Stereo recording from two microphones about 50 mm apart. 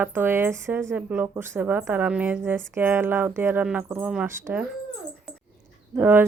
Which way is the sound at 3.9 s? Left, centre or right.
Right.